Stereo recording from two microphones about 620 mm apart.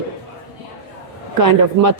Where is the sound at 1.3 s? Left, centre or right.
Right.